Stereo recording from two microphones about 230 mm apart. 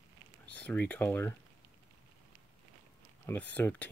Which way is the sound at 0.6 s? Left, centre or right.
Centre.